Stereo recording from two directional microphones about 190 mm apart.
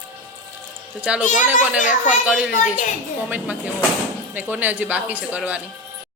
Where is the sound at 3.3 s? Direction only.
10° right (ahead or behind).